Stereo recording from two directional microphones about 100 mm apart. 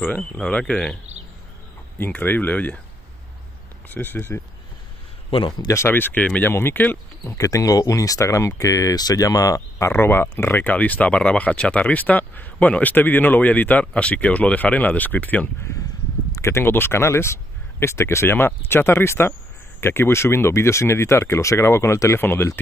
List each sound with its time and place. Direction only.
0.0 s speech: 15° left (ahead or behind)
2.0 s speech: 15° left (ahead or behind)
3.9 s speech: 20° left (ahead or behind)
5.7 s speech: 25° left (ahead or behind)
7.3 s speech: 35° left (ahead or behind)